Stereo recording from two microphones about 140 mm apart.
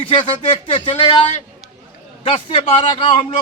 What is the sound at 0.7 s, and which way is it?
Speech, 40° left (ahead or behind).